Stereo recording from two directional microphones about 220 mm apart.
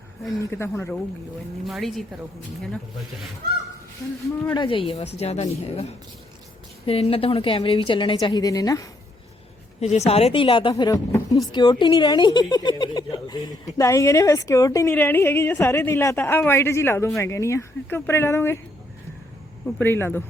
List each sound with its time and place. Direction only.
0.5 s a woman's voice: 10° left (ahead or behind)
1.6 s speech: centre (ahead or behind)
4.5 s a woman's voice: 20° left (ahead or behind)
6.8 s a woman's voice: 25° left (ahead or behind)
10.1 s a woman's voice: 25° left (ahead or behind); by 18.6 s 10° left (ahead or behind)
19.8 s a woman's voice: 10° left (ahead or behind)